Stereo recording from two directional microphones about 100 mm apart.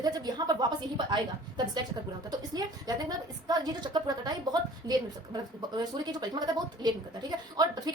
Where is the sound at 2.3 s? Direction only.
40° right (ahead or behind).